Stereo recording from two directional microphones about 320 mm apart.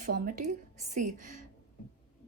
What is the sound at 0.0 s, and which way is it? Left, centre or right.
A woman's voice, right.